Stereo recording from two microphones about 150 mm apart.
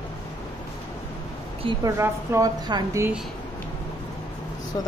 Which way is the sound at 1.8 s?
20° right (ahead or behind).